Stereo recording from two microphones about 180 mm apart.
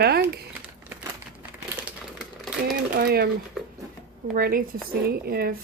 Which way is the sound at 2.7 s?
60° right (ahead or behind).